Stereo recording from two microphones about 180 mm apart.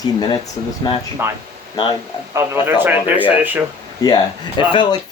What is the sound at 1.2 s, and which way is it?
Speech, 15° right (ahead or behind).